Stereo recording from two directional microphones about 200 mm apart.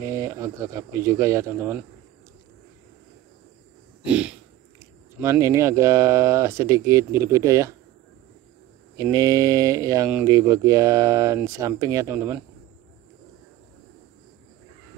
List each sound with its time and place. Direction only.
0.0 s speech: 15° right (ahead or behind)
4.0 s speech: 5° right (ahead or behind)
8.9 s speech: 15° right (ahead or behind)